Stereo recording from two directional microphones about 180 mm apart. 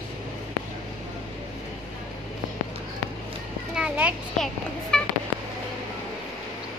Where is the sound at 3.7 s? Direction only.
5° right (ahead or behind).